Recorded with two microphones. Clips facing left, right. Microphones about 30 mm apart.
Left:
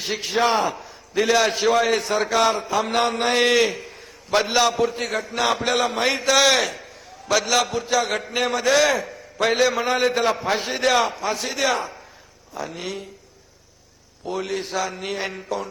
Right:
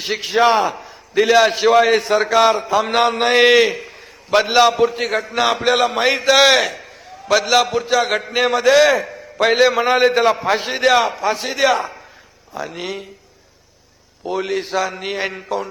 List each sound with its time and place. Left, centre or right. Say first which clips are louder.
0.0 s a man's voice: right 6 dB; right
14.3 s a man's voice: right 5 dB; right